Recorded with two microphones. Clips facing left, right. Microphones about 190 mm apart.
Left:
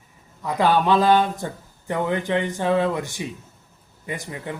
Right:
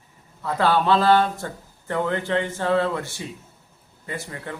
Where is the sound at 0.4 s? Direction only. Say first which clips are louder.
Left 1 dB; 15° left (ahead or behind).